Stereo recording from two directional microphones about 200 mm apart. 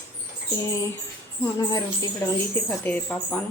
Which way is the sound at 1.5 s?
20° left (ahead or behind).